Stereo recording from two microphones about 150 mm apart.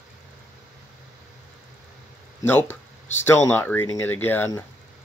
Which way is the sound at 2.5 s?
15° left (ahead or behind).